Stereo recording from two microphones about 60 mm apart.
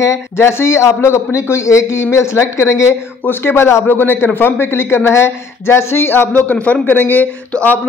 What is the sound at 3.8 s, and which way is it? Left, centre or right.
Speech, left.